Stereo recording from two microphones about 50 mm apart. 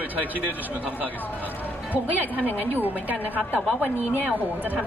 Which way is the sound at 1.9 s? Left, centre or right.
Right.